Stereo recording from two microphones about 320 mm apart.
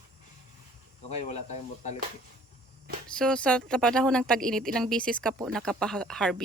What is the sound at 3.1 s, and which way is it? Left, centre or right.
Speech, centre.